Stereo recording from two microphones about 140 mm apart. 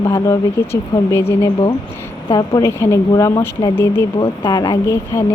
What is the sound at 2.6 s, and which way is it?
Speech, 20° left (ahead or behind).